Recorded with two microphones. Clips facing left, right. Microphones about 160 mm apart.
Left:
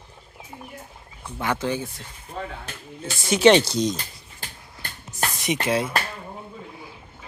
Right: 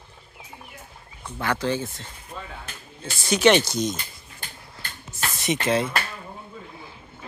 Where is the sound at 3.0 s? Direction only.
25° left (ahead or behind).